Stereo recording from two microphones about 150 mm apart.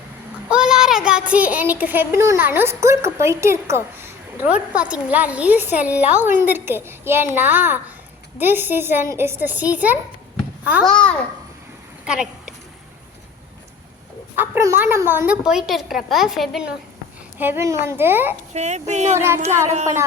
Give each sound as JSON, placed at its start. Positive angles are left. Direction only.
{"t": 0.5, "sound": "a child's voice", "side_deg": -5}
{"t": 10.8, "sound": "a child's voice", "side_deg": 5}
{"t": 12.0, "sound": "a sound", "side_deg": -5}
{"t": 14.3, "sound": "a child's voice", "side_deg": -15}
{"t": 15.4, "sound": "a woman's voice", "side_deg": -5}
{"t": 17.3, "sound": "a child's voice", "side_deg": -15}
{"t": 18.5, "sound": "speech", "side_deg": -50}
{"t": 19.2, "sound": "a child's voice", "side_deg": -15}